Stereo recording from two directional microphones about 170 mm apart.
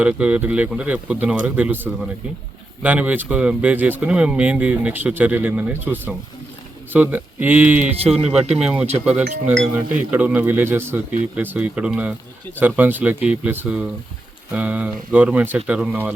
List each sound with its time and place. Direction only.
0.0 s speech: 5° right (ahead or behind)
8.0 s speech: 35° right (ahead or behind)
8.5 s speech: 5° right (ahead or behind)